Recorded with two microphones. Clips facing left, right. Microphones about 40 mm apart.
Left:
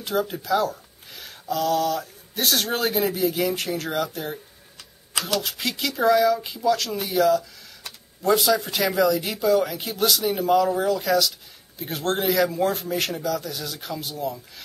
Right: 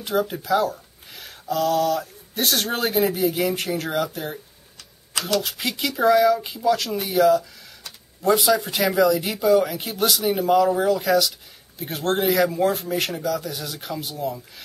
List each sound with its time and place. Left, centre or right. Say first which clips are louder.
0.0 s speech: right 2 dB; centre